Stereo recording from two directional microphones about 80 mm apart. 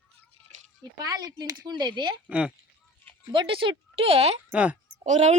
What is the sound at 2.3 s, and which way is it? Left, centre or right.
Speech, centre.